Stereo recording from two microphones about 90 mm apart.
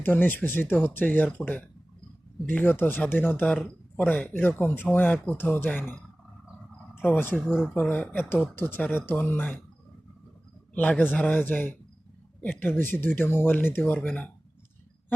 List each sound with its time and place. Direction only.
0.0 s a man's voice: 25° left (ahead or behind)
6.9 s a man's voice: 25° left (ahead or behind)
10.8 s a man's voice: 15° left (ahead or behind)